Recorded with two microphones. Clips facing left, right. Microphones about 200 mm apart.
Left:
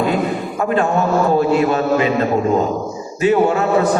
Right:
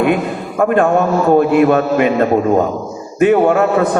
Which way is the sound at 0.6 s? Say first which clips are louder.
Right 5 dB; 55° right (ahead or behind).